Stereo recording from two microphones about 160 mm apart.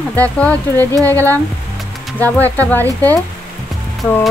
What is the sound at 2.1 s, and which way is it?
Speech, 10° left (ahead or behind).